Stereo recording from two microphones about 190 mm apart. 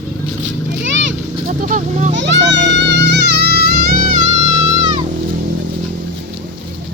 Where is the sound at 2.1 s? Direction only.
70° right (ahead or behind).